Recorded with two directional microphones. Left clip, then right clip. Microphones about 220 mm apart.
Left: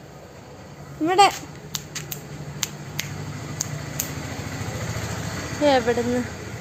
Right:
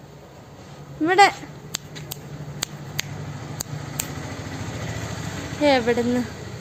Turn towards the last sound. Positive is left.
turn(degrees=-25)  # may be behind; listen again after turning